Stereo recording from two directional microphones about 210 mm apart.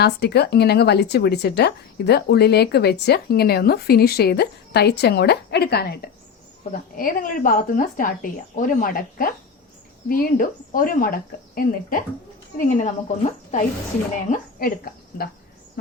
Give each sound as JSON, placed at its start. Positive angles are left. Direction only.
{"t": 0.0, "sound": "a woman's voice", "side_deg": 50}